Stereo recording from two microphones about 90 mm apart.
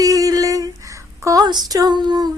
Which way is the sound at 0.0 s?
40° right (ahead or behind).